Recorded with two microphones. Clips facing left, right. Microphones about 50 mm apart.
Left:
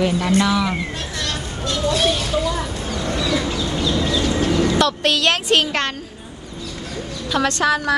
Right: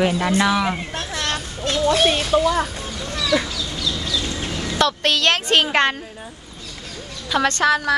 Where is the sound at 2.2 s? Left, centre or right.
Centre.